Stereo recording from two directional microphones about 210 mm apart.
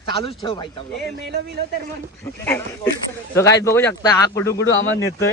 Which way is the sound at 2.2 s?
10° left (ahead or behind).